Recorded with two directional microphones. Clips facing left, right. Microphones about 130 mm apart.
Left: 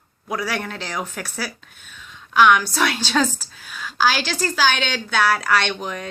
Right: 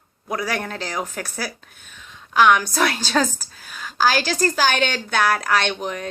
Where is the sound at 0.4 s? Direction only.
40° right (ahead or behind).